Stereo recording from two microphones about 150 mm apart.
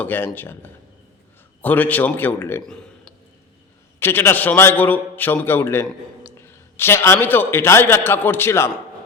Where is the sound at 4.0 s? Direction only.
15° left (ahead or behind).